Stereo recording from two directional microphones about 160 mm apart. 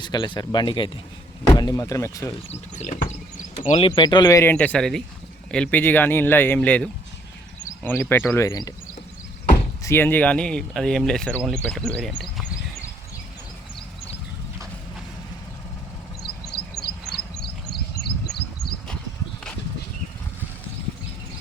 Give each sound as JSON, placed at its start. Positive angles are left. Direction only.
{"t": 0.0, "sound": "speech", "side_deg": 25}
{"t": 2.5, "sound": "speech", "side_deg": 45}
{"t": 3.7, "sound": "speech", "side_deg": 35}
{"t": 4.5, "sound": "speech", "side_deg": 5}
{"t": 9.8, "sound": "speech", "side_deg": 15}
{"t": 16.8, "sound": "a sound", "side_deg": 85}